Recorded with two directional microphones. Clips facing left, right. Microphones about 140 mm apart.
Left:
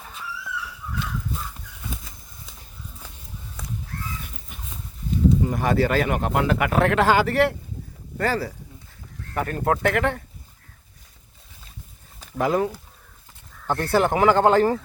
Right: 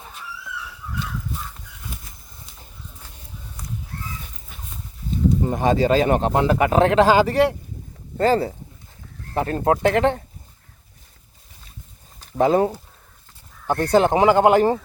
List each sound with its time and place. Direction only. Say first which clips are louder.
5.4 s speech: right 2 dB; 25° right (ahead or behind)
12.4 s speech: right 5 dB; 30° right (ahead or behind)
13.7 s speech: right 4 dB; 20° right (ahead or behind)